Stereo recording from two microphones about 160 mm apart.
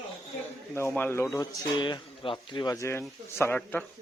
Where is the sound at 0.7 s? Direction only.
15° left (ahead or behind); by 2.7 s 30° left (ahead or behind).